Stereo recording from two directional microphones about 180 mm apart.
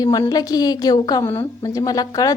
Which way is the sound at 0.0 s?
20° left (ahead or behind).